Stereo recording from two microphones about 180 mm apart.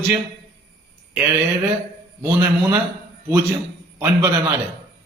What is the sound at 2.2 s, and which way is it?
Speech, 15° right (ahead or behind).